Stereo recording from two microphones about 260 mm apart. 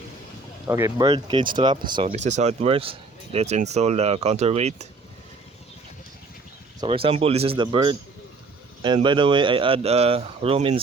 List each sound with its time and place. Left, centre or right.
0.7 s speech: centre
6.7 s speech: right